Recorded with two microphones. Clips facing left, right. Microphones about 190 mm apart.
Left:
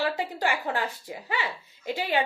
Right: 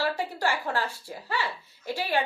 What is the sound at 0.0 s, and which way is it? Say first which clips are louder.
A child's voice: even; 15° left (ahead or behind).